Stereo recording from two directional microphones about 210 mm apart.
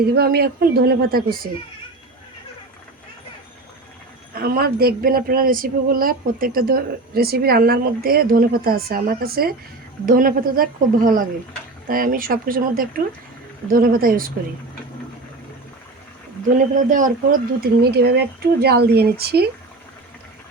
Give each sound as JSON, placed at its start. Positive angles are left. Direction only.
{"t": 0.0, "sound": "speech", "side_deg": -50}
{"t": 4.4, "sound": "a woman's voice", "side_deg": -45}
{"t": 16.5, "sound": "a woman's voice", "side_deg": -40}
{"t": 17.6, "sound": "speech", "side_deg": -50}